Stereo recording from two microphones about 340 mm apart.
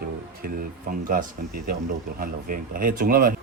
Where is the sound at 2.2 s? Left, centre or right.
Right.